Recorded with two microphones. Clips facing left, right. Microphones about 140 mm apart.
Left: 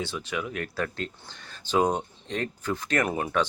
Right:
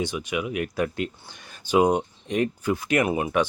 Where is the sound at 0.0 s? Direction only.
15° right (ahead or behind).